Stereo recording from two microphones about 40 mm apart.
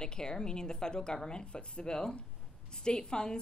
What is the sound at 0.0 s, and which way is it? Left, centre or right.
A woman's voice, centre.